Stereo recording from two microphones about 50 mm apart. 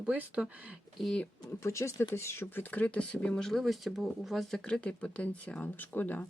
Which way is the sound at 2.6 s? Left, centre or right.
Left.